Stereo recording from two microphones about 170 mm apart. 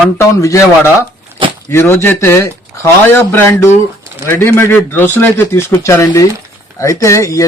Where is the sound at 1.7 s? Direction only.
15° left (ahead or behind).